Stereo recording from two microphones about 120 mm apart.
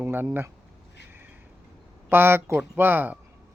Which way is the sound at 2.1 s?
20° right (ahead or behind).